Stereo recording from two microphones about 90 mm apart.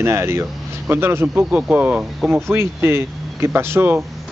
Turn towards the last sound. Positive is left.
turn(degrees=-25)  # may be behind; listen again after turning